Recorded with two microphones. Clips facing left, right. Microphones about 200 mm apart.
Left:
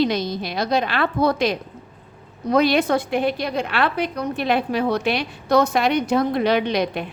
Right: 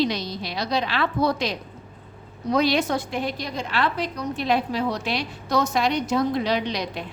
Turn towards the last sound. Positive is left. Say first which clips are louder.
# left 5 dB
turn(degrees=55)  # may be behind; listen again after turning